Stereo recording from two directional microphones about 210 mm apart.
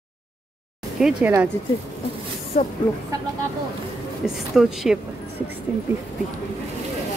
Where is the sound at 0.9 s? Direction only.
Centre (ahead or behind).